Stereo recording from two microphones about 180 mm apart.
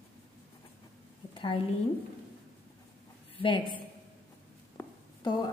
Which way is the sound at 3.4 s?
30° left (ahead or behind).